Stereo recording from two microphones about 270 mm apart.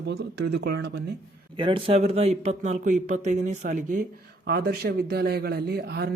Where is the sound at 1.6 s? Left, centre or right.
Centre.